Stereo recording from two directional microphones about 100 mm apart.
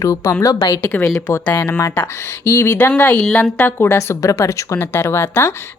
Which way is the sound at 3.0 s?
20° left (ahead or behind).